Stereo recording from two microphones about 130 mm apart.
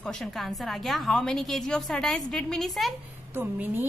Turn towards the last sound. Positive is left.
turn(degrees=-15)  # may be behind; listen again after turning